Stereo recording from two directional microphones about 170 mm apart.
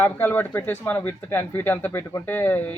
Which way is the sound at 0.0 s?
10° left (ahead or behind).